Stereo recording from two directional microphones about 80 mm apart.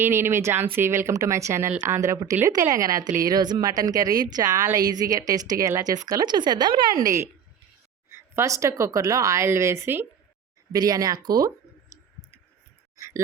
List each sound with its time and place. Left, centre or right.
0.0 s a woman's voice: right
10.7 s speech: right
13.0 s a sound: right